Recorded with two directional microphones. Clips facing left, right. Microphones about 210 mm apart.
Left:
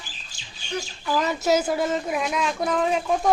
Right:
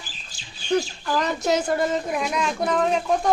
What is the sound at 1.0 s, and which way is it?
Speech, 5° left (ahead or behind).